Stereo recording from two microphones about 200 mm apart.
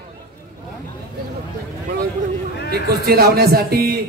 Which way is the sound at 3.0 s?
50° right (ahead or behind).